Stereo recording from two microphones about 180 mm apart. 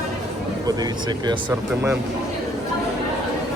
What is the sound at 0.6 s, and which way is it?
Speech, 20° right (ahead or behind).